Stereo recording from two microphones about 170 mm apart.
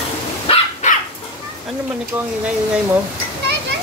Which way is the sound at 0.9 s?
50° left (ahead or behind).